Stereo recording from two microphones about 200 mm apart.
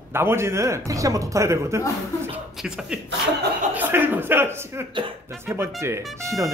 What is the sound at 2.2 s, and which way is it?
Beatboxing, 5° right (ahead or behind).